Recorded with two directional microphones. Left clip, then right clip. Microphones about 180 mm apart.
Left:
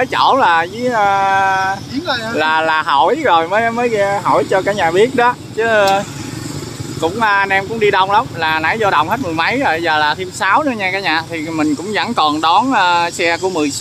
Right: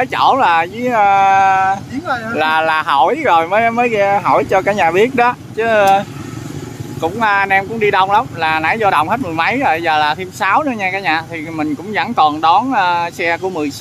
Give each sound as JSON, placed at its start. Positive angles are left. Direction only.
{"t": 0.0, "sound": "speech", "side_deg": -5}
{"t": 2.0, "sound": "speech", "side_deg": -25}
{"t": 2.3, "sound": "speech", "side_deg": -5}